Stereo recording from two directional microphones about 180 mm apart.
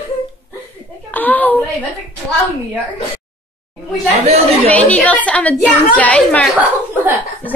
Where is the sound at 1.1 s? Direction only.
10° left (ahead or behind).